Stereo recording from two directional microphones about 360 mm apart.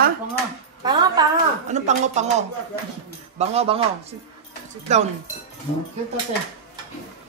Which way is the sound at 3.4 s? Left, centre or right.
Centre.